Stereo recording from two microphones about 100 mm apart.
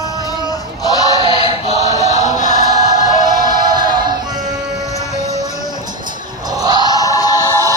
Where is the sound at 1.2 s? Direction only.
60° right (ahead or behind).